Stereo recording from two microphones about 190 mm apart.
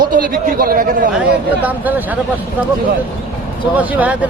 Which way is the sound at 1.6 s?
10° right (ahead or behind).